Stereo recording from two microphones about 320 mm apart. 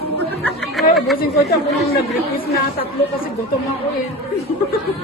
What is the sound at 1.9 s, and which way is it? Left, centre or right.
Speech, left.